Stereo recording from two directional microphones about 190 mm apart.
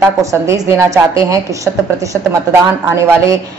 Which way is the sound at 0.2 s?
15° right (ahead or behind).